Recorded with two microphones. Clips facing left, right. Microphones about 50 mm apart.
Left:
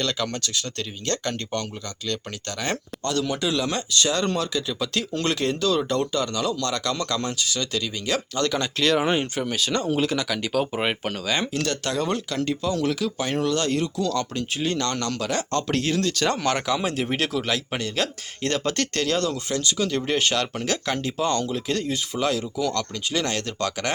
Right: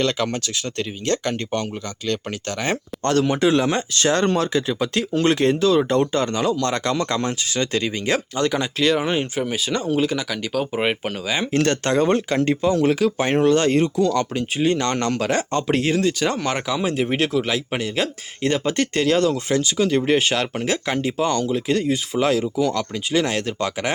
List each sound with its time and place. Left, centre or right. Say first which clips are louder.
0.8 s speech: right 8 dB; centre
3.0 s speech: right 8 dB; right
6.9 s speech: right 4 dB; centre
8.4 s speech: right 3 dB; centre
11.5 s speech: right 7 dB; right
15.5 s speech: right 2 dB; centre